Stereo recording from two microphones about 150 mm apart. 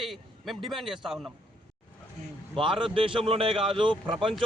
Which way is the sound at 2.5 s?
35° right (ahead or behind).